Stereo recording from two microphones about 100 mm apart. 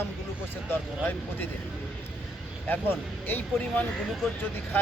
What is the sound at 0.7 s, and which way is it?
Speech, 20° left (ahead or behind).